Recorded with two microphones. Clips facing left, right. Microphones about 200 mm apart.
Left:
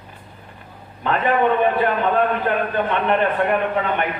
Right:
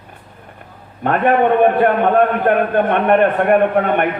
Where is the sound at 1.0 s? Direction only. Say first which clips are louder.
Right 4 dB; 55° right (ahead or behind).